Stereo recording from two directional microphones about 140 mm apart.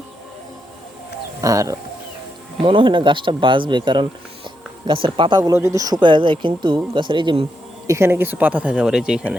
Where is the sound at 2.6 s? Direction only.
35° right (ahead or behind).